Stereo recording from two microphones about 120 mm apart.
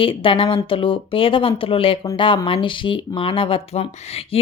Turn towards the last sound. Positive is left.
turn(degrees=55)  # may be behind; listen again after turning